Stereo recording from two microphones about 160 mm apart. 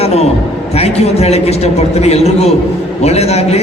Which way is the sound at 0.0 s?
40° left (ahead or behind).